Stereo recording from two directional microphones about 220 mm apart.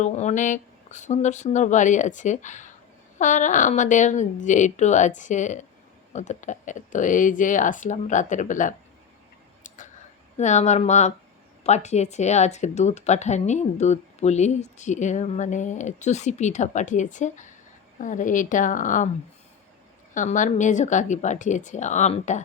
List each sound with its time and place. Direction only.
0.0 s speech: 30° left (ahead or behind)
9.6 s a sound: 35° left (ahead or behind)
10.3 s speech: 30° left (ahead or behind)
20.1 s speech: 35° left (ahead or behind)